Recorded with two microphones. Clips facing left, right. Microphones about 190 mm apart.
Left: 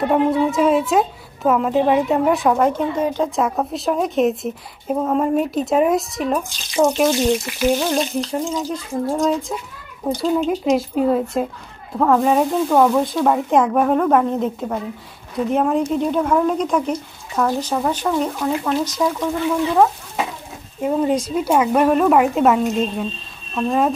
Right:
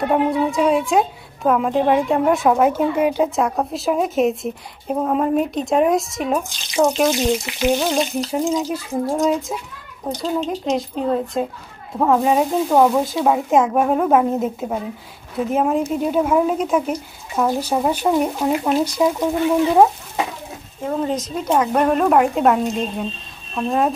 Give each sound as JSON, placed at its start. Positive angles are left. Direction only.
{"t": 0.1, "sound": "a woman's voice", "side_deg": -5}
{"t": 10.1, "sound": "a woman's voice", "side_deg": 5}
{"t": 12.0, "sound": "a woman's voice", "side_deg": -5}
{"t": 20.8, "sound": "a woman's voice", "side_deg": 10}